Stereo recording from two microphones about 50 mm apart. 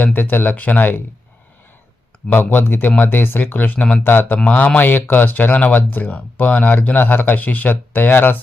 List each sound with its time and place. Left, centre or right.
0.0 s speech: left
2.3 s speech: left
4.4 s speech: left
4.9 s speech: left